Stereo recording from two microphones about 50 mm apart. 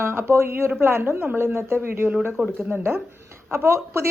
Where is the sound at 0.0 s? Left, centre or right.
Right.